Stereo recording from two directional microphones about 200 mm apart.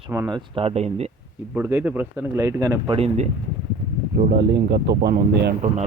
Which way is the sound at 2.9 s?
35° right (ahead or behind).